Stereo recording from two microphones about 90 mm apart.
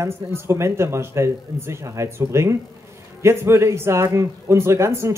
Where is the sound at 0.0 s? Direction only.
30° right (ahead or behind).